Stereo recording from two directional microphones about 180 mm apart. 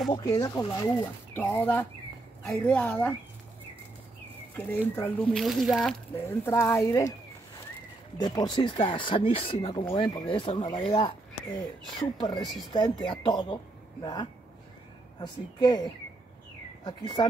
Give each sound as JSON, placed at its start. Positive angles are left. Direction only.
{"t": 0.1, "sound": "speech", "side_deg": 20}
{"t": 1.3, "sound": "speech", "side_deg": 10}
{"t": 4.6, "sound": "speech", "side_deg": 10}
{"t": 5.4, "sound": "speech", "side_deg": 0}
{"t": 6.2, "sound": "speech", "side_deg": 15}
{"t": 8.2, "sound": "speech", "side_deg": 25}
{"t": 12.4, "sound": "speech", "side_deg": 0}
{"t": 12.7, "sound": "speech", "side_deg": 25}
{"t": 15.1, "sound": "speech", "side_deg": 25}